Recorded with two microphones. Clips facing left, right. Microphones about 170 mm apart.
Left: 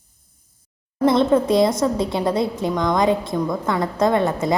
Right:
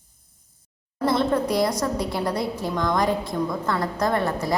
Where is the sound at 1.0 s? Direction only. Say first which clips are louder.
Left 5 dB; 20° left (ahead or behind).